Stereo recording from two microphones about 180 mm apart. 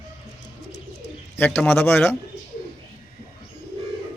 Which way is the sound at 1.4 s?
10° left (ahead or behind).